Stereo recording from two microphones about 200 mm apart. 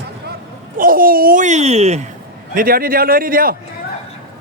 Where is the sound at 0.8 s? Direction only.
45° right (ahead or behind).